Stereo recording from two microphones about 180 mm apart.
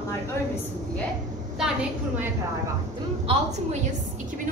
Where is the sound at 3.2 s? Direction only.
40° right (ahead or behind).